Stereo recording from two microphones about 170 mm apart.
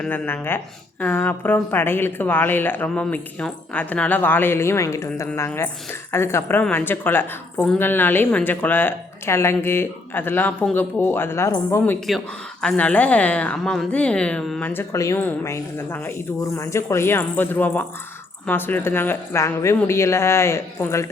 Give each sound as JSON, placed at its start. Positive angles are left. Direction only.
{"t": 0.0, "sound": "speech", "side_deg": 10}